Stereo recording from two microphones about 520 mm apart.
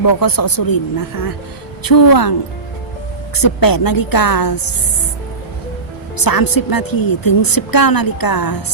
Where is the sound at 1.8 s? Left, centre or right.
Left.